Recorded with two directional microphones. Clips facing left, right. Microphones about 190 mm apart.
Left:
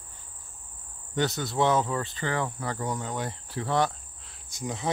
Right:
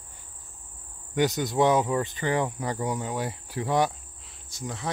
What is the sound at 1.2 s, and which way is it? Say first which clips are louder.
Cricket: right 3 dB; 15° right (ahead or behind).